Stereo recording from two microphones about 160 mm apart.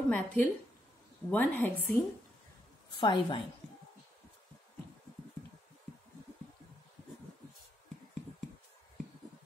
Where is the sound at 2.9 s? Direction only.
30° left (ahead or behind).